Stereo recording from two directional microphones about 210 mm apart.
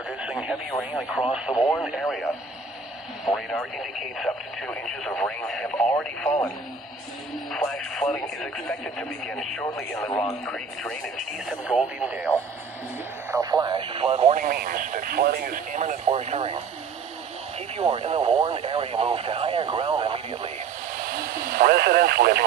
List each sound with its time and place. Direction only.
0.2 s radio: 5° right (ahead or behind)
1.3 s speech: 5° right (ahead or behind)
3.3 s speech: centre (ahead or behind)
7.5 s speech: centre (ahead or behind)
13.3 s speech: 15° right (ahead or behind)
14.4 s speech: 45° right (ahead or behind); by 16.6 s 30° right (ahead or behind)
17.8 s speech: 25° right (ahead or behind)
21.1 s speech: 45° right (ahead or behind)